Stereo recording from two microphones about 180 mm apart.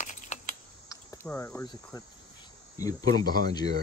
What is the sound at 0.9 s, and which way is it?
Cricket, 15° left (ahead or behind).